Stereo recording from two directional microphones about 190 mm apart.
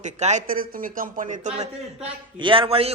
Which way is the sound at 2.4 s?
25° right (ahead or behind).